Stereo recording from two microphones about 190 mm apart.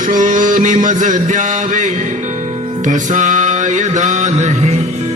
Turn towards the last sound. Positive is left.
turn(degrees=-35)  # may be behind; listen again after turning